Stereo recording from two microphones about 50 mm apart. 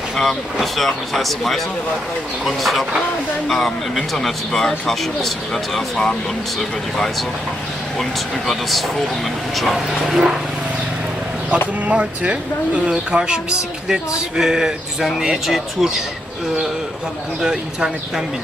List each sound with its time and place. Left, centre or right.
0.2 s speech: centre
3.9 s speech: centre
6.6 s speech: centre
9.6 s speech: centre
11.9 s speech: right; by 16.0 s centre
17.4 s speech: centre